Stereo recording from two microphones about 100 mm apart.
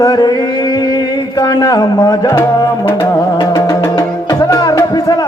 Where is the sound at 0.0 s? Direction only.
40° left (ahead or behind).